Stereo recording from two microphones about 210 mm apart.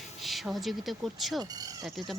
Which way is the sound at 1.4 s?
20° right (ahead or behind).